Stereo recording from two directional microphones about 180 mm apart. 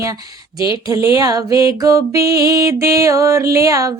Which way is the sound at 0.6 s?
20° right (ahead or behind).